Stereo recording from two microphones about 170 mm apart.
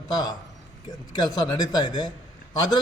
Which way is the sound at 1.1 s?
25° left (ahead or behind).